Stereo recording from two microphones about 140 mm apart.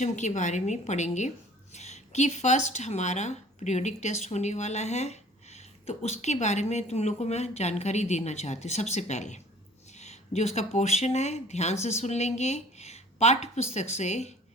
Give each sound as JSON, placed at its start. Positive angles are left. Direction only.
{"t": 0.0, "sound": "a woman's voice", "side_deg": 60}